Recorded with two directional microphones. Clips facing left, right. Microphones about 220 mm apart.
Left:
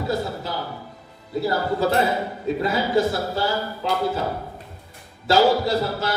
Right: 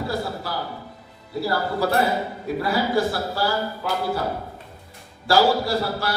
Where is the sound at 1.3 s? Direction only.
20° left (ahead or behind).